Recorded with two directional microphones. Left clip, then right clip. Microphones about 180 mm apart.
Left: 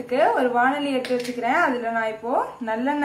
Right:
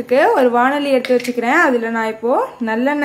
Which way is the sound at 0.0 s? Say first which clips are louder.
Right 7 dB; 55° right (ahead or behind).